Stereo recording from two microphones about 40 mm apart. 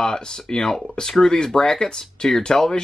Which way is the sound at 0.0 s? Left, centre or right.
Centre.